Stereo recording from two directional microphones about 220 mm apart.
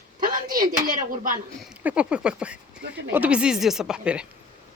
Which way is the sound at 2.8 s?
50° right (ahead or behind).